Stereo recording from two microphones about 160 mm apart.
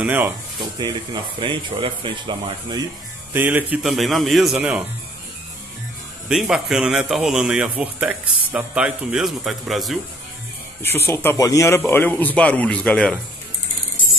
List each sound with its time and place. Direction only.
0.0 s speech: 10° right (ahead or behind)
0.6 s speech: 25° right (ahead or behind)
3.3 s a man's voice: 10° right (ahead or behind)
6.2 s a man's voice: 5° right (ahead or behind)
10.8 s a man's voice: 15° left (ahead or behind)